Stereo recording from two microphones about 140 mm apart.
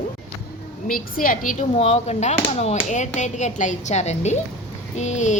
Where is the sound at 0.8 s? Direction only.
85° left.